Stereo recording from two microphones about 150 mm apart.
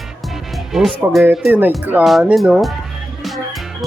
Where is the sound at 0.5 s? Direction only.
Centre (ahead or behind).